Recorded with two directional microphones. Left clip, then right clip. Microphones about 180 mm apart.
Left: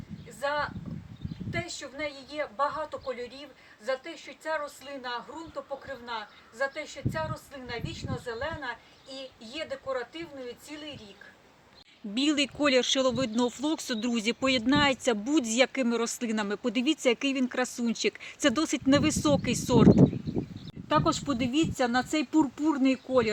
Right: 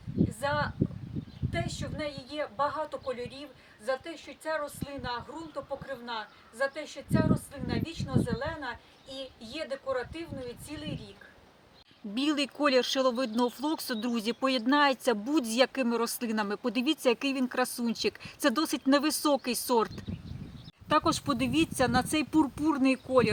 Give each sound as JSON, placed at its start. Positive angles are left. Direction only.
{"t": 0.4, "sound": "a woman's voice", "side_deg": 5}
{"t": 12.1, "sound": "speech", "side_deg": 20}